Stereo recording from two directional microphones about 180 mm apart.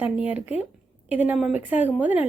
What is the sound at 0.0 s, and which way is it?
Speech, 10° right (ahead or behind).